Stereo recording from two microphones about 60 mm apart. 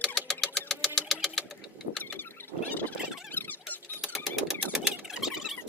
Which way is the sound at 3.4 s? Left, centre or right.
Left.